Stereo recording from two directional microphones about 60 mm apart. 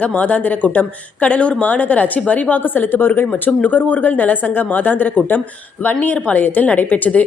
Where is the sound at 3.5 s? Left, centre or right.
Left.